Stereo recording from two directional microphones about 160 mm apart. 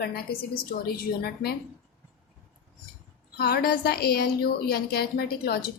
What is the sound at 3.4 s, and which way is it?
A woman's voice, 75° left (ahead or behind).